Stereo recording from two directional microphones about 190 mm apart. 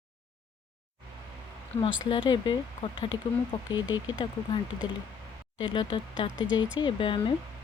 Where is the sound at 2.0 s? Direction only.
25° left (ahead or behind).